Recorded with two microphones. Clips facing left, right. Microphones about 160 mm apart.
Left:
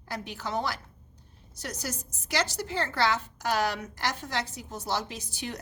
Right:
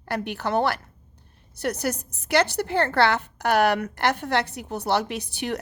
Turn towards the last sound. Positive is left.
turn(degrees=-65)  # may be behind; listen again after turning